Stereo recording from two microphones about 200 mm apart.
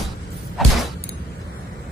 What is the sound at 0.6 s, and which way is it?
Creak, centre (ahead or behind).